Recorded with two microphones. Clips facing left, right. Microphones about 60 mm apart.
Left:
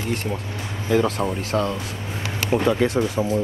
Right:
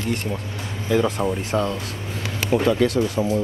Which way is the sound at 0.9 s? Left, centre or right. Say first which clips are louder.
Even; centre.